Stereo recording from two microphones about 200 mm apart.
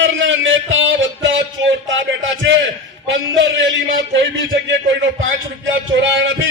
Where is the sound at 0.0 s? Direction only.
70° right (ahead or behind).